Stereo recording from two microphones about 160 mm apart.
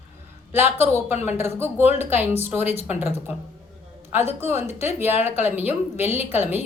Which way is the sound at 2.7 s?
40° left (ahead or behind).